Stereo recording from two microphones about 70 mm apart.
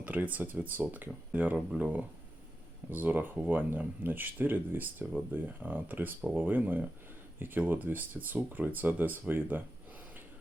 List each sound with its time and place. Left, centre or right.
0.0 s speech: right